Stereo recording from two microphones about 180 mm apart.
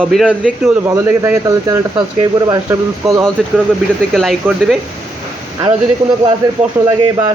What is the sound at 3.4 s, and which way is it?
Speech, centre (ahead or behind).